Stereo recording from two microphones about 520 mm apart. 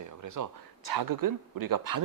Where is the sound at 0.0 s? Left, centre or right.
Right.